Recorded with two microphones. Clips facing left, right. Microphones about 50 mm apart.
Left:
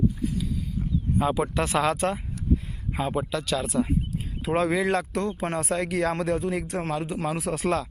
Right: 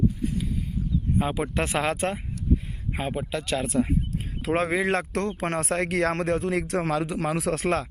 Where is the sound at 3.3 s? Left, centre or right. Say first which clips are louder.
Even; right.